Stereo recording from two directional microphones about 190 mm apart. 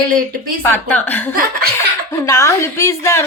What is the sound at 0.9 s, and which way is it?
A woman's voice, 10° left (ahead or behind).